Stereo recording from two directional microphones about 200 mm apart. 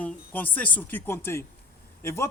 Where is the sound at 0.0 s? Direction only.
10° left (ahead or behind).